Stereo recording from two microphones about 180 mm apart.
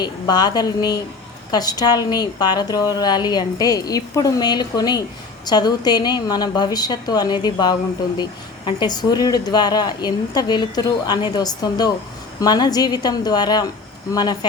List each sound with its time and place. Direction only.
0.0 s speech: 25° left (ahead or behind)